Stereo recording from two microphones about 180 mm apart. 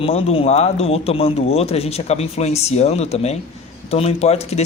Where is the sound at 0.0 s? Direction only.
35° left (ahead or behind).